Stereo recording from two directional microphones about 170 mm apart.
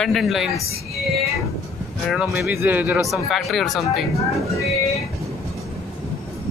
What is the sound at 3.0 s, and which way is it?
Speech, centre (ahead or behind).